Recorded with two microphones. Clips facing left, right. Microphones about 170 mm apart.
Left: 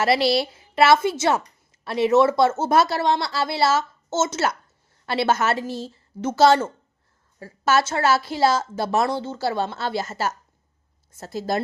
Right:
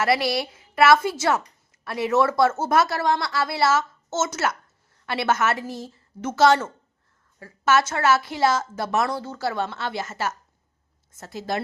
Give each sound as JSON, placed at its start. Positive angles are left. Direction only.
{"t": 0.0, "sound": "a woman's voice", "side_deg": 30}